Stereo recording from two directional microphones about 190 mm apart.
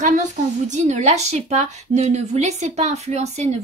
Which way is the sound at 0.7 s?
40° right (ahead or behind).